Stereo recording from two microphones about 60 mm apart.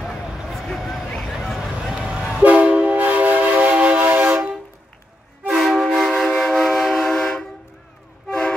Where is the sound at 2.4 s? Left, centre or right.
Right.